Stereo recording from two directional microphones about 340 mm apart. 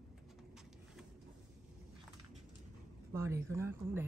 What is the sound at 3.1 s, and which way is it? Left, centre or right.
Speech, centre.